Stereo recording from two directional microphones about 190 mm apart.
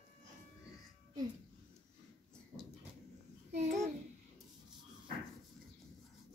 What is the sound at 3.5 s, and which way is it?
Babbling, 35° right (ahead or behind).